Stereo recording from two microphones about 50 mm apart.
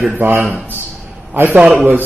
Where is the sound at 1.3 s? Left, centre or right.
Right.